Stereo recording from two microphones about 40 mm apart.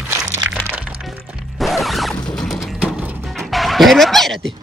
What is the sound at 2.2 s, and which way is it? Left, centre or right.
Mechanisms, centre.